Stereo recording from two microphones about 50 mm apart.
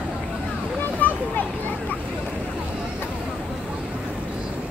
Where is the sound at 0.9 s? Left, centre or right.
Left.